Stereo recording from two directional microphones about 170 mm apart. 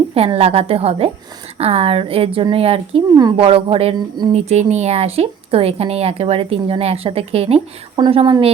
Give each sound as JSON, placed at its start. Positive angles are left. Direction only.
{"t": 0.1, "sound": "a woman's voice", "side_deg": -35}
{"t": 3.2, "sound": "speech", "side_deg": -25}
{"t": 3.4, "sound": "a woman's voice", "side_deg": -35}